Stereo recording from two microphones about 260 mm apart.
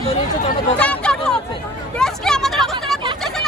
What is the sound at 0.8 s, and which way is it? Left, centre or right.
Hubbub, centre.